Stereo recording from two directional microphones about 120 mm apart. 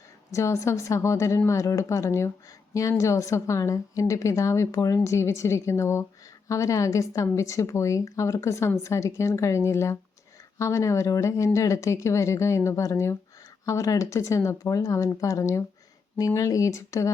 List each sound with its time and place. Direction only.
0.3 s a woman's voice: 25° left (ahead or behind)